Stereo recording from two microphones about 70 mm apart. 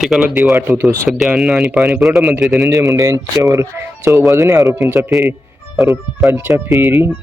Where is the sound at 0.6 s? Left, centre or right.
Right.